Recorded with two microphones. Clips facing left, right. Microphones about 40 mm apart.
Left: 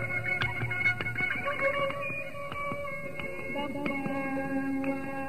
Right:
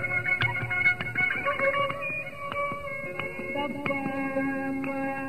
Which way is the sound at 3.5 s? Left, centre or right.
Centre.